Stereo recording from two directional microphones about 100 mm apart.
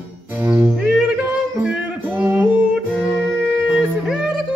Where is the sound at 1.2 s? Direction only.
10° right (ahead or behind).